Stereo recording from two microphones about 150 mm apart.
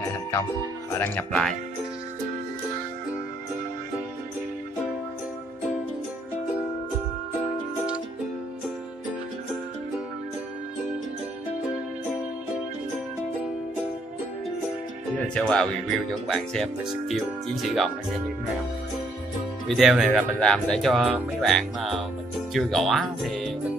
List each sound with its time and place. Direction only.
0.0 s music: 20° left (ahead or behind)
0.9 s speech: 15° left (ahead or behind)
15.1 s music: 5° left (ahead or behind)
16.3 s speech: centre (ahead or behind)
19.7 s speech: centre (ahead or behind)